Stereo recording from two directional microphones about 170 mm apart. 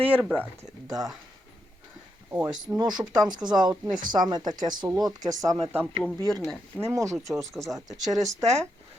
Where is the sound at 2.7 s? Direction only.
10° right (ahead or behind).